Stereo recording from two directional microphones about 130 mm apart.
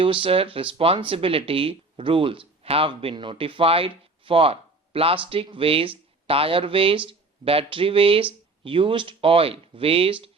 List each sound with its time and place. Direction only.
0.0 s speech: 45° right (ahead or behind)